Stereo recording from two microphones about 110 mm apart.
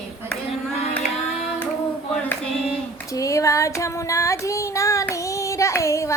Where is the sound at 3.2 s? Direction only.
30° left (ahead or behind).